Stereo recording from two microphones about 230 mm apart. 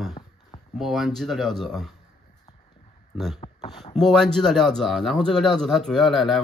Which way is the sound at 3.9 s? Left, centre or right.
Centre.